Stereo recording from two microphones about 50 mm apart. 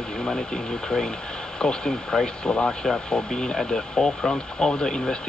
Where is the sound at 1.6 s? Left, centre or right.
Centre.